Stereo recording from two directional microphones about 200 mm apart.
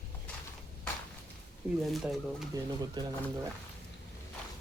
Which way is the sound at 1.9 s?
Centre (ahead or behind).